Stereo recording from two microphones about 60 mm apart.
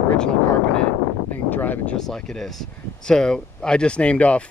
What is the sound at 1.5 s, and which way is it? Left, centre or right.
Speech, left.